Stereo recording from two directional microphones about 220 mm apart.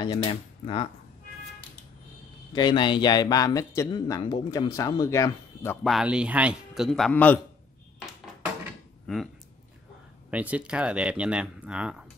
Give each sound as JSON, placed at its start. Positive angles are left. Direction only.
{"t": 0.0, "sound": "speech", "side_deg": 25}
{"t": 2.5, "sound": "speech", "side_deg": 20}
{"t": 5.9, "sound": "speech", "side_deg": -5}
{"t": 9.0, "sound": "speech", "side_deg": 0}
{"t": 10.3, "sound": "speech", "side_deg": -5}